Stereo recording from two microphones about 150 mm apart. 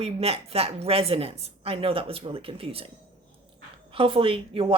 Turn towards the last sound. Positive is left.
turn(degrees=-35)  # may be behind; listen again after turning